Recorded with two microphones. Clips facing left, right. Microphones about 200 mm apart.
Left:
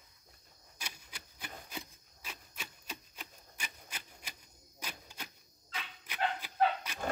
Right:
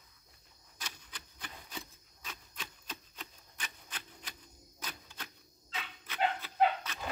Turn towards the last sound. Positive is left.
turn(degrees=10)  # may be behind; listen again after turning